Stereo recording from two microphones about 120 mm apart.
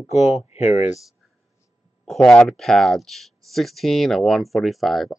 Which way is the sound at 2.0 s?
Centre (ahead or behind).